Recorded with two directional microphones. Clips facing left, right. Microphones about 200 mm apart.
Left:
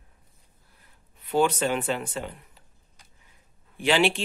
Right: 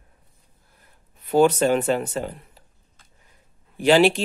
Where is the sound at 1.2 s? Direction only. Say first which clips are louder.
Right 6 dB; 40° right (ahead or behind).